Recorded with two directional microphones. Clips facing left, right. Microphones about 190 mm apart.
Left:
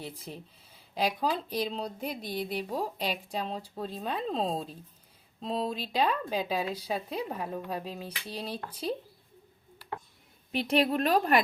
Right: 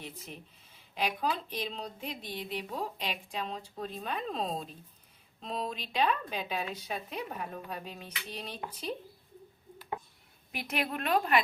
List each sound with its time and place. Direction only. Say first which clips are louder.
0.0 s a woman's voice: left 4 dB; 35° left (ahead or behind)
10.5 s a woman's voice: left 8 dB; 30° left (ahead or behind)